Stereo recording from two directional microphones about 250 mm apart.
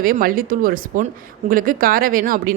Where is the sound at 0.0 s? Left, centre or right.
Right.